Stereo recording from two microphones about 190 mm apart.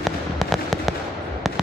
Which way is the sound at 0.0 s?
Centre (ahead or behind).